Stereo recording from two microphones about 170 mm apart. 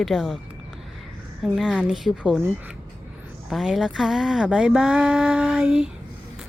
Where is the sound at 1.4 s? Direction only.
Centre (ahead or behind).